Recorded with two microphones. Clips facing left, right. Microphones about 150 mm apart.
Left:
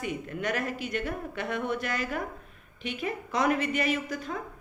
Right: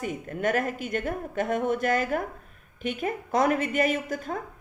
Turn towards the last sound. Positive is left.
turn(degrees=-50)  # may be behind; listen again after turning